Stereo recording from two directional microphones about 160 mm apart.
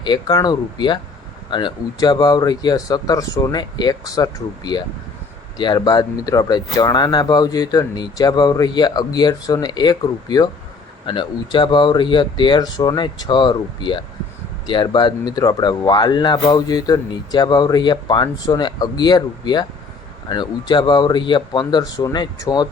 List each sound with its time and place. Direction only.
0.0 s speech: 25° left (ahead or behind)